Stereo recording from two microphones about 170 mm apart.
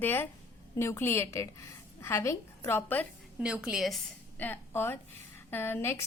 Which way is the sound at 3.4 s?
5° right (ahead or behind).